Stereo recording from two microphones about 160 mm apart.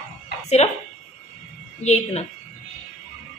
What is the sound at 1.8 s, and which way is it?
Speech, 45° left (ahead or behind).